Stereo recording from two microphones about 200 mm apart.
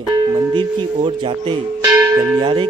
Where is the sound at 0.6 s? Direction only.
25° right (ahead or behind).